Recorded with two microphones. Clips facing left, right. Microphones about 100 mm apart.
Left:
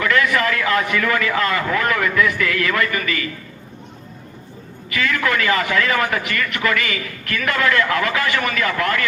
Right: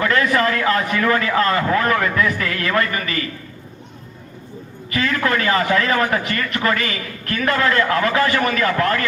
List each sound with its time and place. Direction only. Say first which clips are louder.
0.0 s a man's voice: right 1 dB; 35° right (ahead or behind)
4.9 s a man's voice: right 1 dB; 35° right (ahead or behind)